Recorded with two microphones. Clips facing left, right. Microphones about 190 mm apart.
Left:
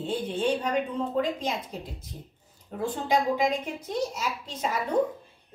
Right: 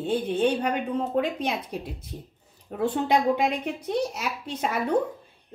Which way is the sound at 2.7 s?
65° right (ahead or behind).